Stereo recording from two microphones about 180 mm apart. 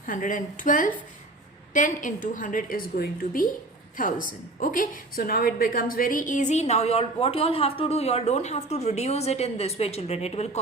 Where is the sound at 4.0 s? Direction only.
50° left (ahead or behind).